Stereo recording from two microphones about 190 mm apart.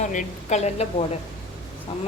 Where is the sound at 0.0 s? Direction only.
40° left (ahead or behind).